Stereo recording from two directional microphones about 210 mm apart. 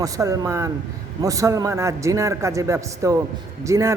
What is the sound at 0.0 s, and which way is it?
A man's voice, 15° right (ahead or behind).